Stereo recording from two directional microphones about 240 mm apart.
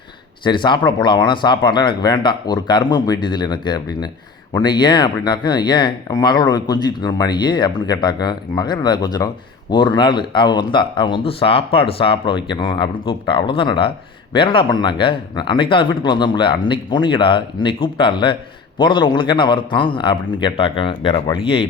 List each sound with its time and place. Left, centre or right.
0.4 s speech: centre